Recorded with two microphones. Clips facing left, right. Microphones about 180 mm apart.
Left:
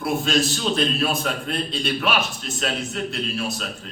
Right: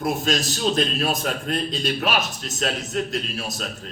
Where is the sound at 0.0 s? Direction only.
40° right (ahead or behind).